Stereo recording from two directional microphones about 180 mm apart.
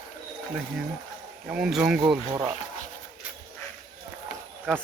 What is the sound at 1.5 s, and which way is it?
Speech, 5° right (ahead or behind).